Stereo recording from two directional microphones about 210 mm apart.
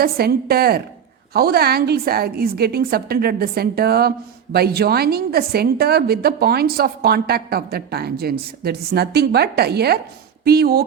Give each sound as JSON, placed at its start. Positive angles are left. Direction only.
{"t": 0.0, "sound": "a woman's voice", "side_deg": -45}